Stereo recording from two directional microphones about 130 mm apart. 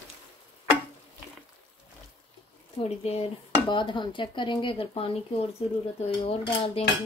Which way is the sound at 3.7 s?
40° left (ahead or behind).